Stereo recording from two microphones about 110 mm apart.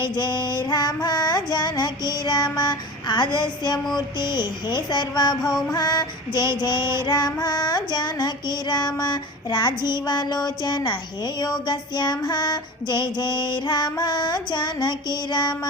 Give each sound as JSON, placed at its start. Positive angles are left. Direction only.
{"t": 0.0, "sound": "music", "side_deg": 45}
{"t": 3.9, "sound": "female singing", "side_deg": 40}